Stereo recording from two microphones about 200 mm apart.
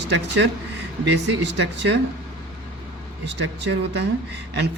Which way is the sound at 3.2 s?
60° right (ahead or behind).